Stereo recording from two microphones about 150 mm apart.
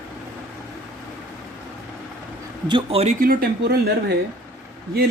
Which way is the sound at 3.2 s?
80° right.